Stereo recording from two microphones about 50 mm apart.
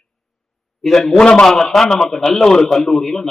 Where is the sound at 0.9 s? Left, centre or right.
Centre.